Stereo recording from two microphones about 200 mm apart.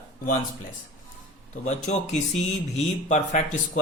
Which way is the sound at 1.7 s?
35° left (ahead or behind).